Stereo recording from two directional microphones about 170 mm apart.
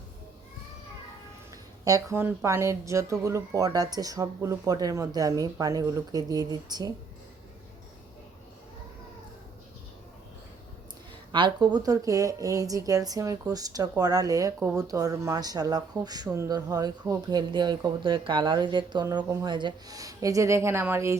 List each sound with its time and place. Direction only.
1.8 s speech: 20° right (ahead or behind)
11.3 s speech: 25° right (ahead or behind)